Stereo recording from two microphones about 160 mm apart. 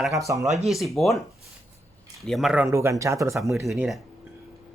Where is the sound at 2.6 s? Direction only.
15° right (ahead or behind).